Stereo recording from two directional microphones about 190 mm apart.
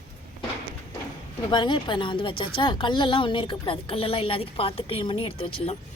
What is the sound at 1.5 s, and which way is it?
A woman's voice, 25° left (ahead or behind).